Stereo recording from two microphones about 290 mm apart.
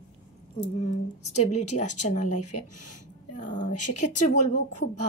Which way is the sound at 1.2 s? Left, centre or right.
Left.